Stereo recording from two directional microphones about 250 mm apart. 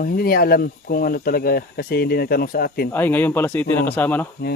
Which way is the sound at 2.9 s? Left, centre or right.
Centre.